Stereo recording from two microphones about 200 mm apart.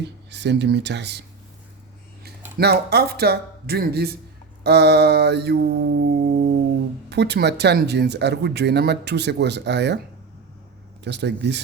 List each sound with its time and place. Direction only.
0.0 s speech: 60° right (ahead or behind)
2.6 s speech: 55° right (ahead or behind)
11.0 s speech: 55° right (ahead or behind)